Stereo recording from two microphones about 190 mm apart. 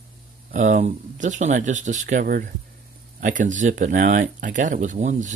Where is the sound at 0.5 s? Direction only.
40° right (ahead or behind).